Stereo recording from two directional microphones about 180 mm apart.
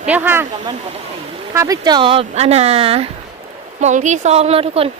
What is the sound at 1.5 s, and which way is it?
Speech, 20° right (ahead or behind).